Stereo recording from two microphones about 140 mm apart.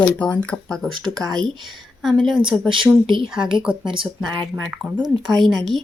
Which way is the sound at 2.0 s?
Centre (ahead or behind).